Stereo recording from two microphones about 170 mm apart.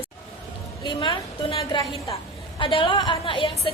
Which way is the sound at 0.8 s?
30° left (ahead or behind).